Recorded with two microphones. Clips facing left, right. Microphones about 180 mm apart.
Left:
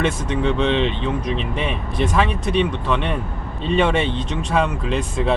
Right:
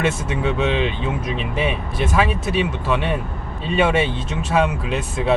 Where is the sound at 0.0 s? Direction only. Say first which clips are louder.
Left 1 dB; 5° right (ahead or behind).